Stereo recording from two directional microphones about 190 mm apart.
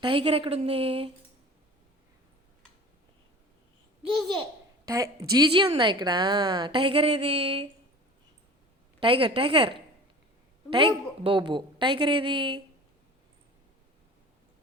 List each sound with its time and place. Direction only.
0.0 s a woman's voice: 30° right (ahead or behind)
5.4 s a woman's voice: 25° right (ahead or behind)
9.0 s a woman's voice: 25° right (ahead or behind)